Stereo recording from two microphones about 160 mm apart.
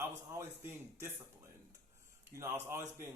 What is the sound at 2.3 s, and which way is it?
Speech, 15° right (ahead or behind).